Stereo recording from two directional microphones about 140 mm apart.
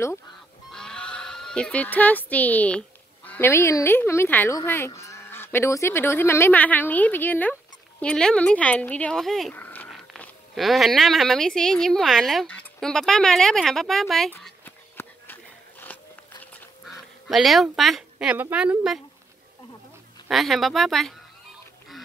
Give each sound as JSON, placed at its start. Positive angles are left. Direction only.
{"t": 0.7, "sound": "a sound", "side_deg": 5}
{"t": 3.3, "sound": "speech", "side_deg": 15}
{"t": 9.6, "sound": "dog", "side_deg": 15}
{"t": 9.8, "sound": "a sound", "side_deg": 0}
{"t": 10.5, "sound": "a woman's voice", "side_deg": 0}
{"t": 14.6, "sound": "a sound", "side_deg": 15}
{"t": 16.8, "sound": "duck", "side_deg": 0}
{"t": 18.3, "sound": "speech", "side_deg": -10}
{"t": 20.2, "sound": "a woman's voice", "side_deg": 0}